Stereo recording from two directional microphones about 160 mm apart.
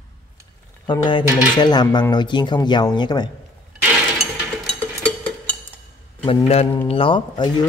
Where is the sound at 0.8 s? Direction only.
30° left (ahead or behind).